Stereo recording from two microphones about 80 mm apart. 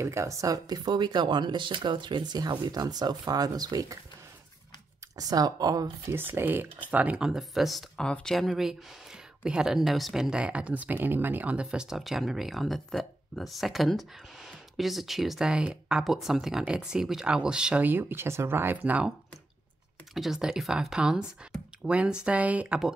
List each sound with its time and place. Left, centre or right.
0.0 s speech: right
5.1 s speech: right
6.1 s speech: right
7.2 s speech: centre; by 11.6 s right
11.7 s speech: centre
17.8 s speech: right
20.2 s speech: centre